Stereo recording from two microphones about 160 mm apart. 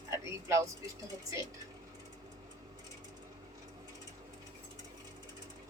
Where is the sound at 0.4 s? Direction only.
20° right (ahead or behind).